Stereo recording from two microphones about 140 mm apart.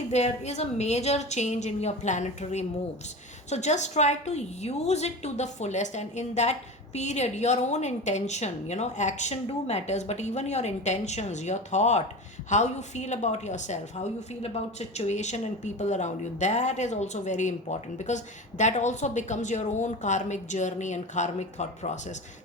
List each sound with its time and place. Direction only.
0.1 s a woman's voice: 55° left (ahead or behind)